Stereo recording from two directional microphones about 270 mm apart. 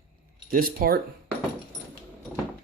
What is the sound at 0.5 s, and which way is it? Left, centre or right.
Speech, right.